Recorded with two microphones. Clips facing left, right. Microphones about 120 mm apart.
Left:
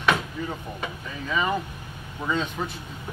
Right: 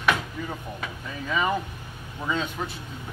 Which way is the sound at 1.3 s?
5° right (ahead or behind).